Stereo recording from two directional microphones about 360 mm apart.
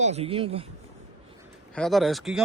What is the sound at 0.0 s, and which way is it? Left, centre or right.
Speech, centre.